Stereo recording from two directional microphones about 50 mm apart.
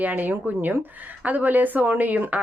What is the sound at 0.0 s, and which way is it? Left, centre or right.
A woman's voice, right.